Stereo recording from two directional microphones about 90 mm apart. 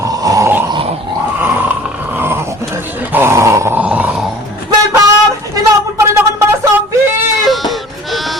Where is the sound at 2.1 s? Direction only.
25° right (ahead or behind).